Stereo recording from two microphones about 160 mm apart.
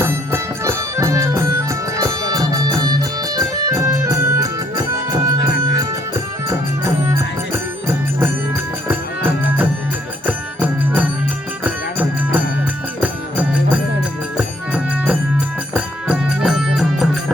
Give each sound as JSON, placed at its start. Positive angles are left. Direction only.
{"t": 0.0, "sound": "music", "side_deg": -15}
{"t": 6.1, "sound": "music", "side_deg": -20}